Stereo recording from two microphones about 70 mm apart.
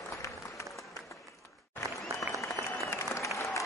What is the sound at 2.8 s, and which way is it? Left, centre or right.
Applause, left.